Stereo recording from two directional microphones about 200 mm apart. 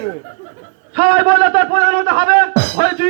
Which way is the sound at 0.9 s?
45° right (ahead or behind).